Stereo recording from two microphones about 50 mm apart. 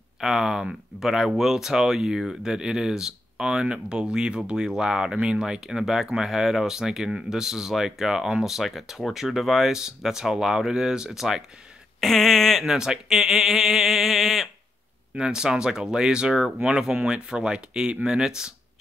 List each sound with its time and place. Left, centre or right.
0.2 s speech: centre
12.0 s a sound: centre
12.6 s speech: centre
15.1 s speech: centre